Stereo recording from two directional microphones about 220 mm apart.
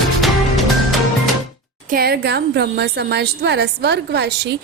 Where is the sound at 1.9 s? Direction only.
45° right (ahead or behind).